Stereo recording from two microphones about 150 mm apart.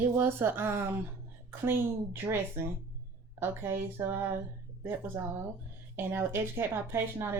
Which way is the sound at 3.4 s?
15° right (ahead or behind).